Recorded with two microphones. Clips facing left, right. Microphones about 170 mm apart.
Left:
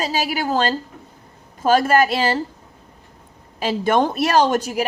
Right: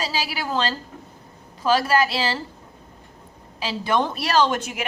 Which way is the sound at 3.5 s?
50° left (ahead or behind).